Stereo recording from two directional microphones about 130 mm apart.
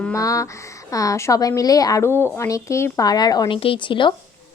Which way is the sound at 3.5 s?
45° left (ahead or behind).